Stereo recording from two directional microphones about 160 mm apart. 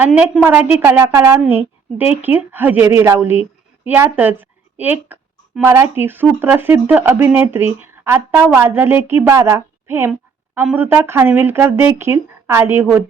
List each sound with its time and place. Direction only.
0.0 s a woman's voice: 10° right (ahead or behind)